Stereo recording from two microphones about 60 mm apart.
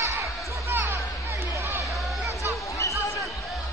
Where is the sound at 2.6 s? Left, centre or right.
Left.